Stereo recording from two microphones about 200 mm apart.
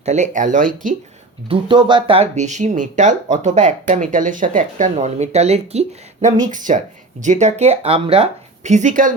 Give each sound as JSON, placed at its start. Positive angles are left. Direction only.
{"t": 0.0, "sound": "speech", "side_deg": -35}
{"t": 1.5, "sound": "speech", "side_deg": -25}
{"t": 7.2, "sound": "speech", "side_deg": -35}